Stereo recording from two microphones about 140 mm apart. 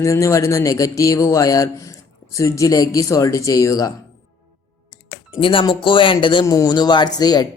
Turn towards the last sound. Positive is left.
turn(degrees=30)  # may be behind; listen again after turning